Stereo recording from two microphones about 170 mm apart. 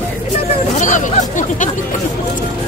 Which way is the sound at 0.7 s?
45° left (ahead or behind).